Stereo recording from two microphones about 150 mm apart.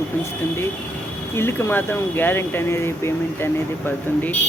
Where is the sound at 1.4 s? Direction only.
15° left (ahead or behind).